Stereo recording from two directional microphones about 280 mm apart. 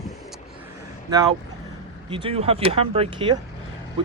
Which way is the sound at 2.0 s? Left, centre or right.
Centre.